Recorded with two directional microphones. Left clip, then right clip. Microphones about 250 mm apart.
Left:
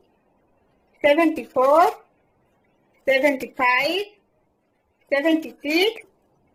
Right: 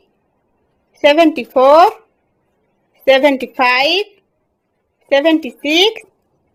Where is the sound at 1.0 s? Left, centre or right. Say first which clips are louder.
Right 8 dB; right.